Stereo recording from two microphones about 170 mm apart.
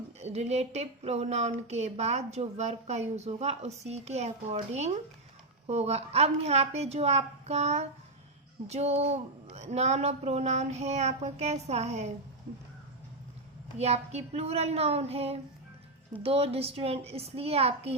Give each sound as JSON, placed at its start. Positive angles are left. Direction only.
{"t": 0.2, "sound": "a woman's voice", "side_deg": -40}
{"t": 13.7, "sound": "a woman's voice", "side_deg": -40}